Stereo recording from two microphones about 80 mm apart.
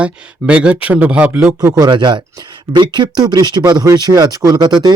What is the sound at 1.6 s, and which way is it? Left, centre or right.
Speech, right.